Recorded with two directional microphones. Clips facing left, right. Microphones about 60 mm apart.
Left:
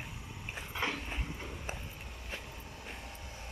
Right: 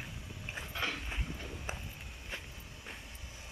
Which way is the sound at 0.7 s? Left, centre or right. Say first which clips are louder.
Left 2 dB; left.